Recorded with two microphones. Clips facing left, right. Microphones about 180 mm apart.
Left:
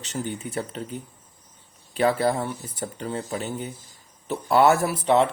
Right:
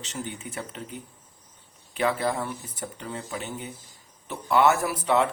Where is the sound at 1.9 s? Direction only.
35° left (ahead or behind).